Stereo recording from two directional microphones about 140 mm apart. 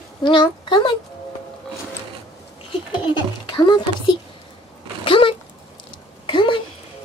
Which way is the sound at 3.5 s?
30° left (ahead or behind).